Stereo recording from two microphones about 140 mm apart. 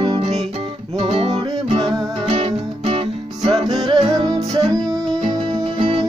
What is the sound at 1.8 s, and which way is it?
Music, 30° right (ahead or behind).